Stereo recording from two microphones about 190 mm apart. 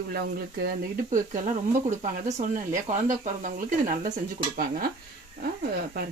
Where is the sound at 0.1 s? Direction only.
55° right (ahead or behind).